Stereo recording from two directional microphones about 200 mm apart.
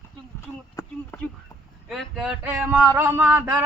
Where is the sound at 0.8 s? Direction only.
10° left (ahead or behind).